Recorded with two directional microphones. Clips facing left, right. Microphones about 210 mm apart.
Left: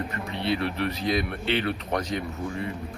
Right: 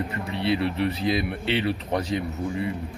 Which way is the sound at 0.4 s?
25° right (ahead or behind).